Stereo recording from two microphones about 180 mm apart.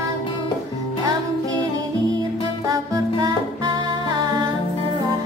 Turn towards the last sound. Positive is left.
turn(degrees=-25)  # may be behind; listen again after turning